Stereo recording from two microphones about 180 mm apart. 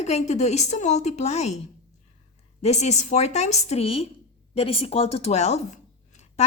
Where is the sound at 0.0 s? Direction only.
40° left (ahead or behind).